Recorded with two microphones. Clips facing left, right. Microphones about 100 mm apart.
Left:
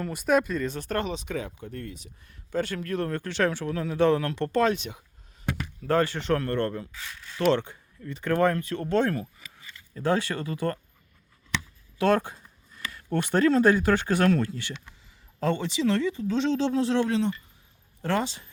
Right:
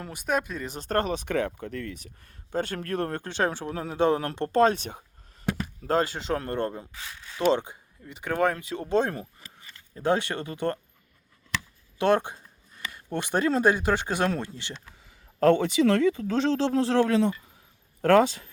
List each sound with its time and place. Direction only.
0.1 s speech: centre (ahead or behind)
0.9 s speech: 45° right (ahead or behind)
1.2 s speech: 65° right (ahead or behind)
2.0 s speech: 45° right (ahead or behind)
3.2 s speech: 20° right (ahead or behind)
4.6 s speech: 45° right (ahead or behind)
5.5 s speech: 25° right (ahead or behind)
11.9 s speech: 25° right (ahead or behind)
15.0 s speech: 55° right (ahead or behind)